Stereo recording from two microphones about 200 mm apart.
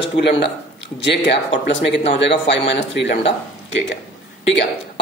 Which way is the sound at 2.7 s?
60° left (ahead or behind).